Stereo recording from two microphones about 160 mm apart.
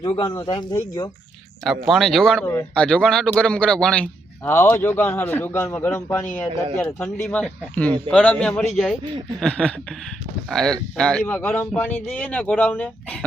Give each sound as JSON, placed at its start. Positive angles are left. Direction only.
{"t": 0.0, "sound": "speech", "side_deg": 30}
{"t": 1.6, "sound": "speech", "side_deg": 0}
{"t": 2.4, "sound": "a man's voice", "side_deg": 20}
{"t": 2.7, "sound": "a man's voice", "side_deg": 5}